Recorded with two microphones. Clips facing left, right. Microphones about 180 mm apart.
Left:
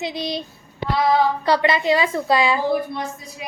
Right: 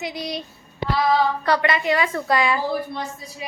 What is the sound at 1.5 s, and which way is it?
A woman's voice, 30° left (ahead or behind).